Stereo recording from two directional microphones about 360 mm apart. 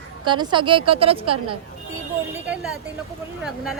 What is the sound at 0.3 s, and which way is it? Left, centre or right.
A woman's voice, centre.